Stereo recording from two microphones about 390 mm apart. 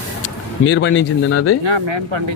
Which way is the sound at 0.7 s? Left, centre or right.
Left.